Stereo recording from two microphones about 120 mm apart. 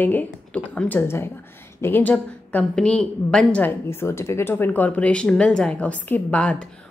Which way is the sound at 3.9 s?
20° left (ahead or behind).